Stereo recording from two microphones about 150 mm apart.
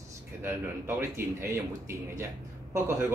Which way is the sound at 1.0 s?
15° right (ahead or behind).